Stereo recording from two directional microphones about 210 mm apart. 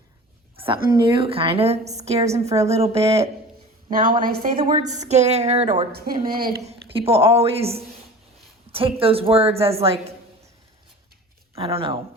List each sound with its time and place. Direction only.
0.5 s a sound: 25° right (ahead or behind)
0.9 s a woman's voice: 20° right (ahead or behind)
3.8 s a woman's voice: 40° right (ahead or behind)
4.5 s a woman's voice: 20° right (ahead or behind)
5.0 s a woman's voice: 30° right (ahead or behind)
5.9 s speech: 45° right (ahead or behind)
6.7 s a woman's voice: 25° right (ahead or behind)
7.2 s a woman's voice: 10° right (ahead or behind)
7.4 s a woman's voice: 30° right (ahead or behind)
11.5 s a woman's voice: 25° right (ahead or behind)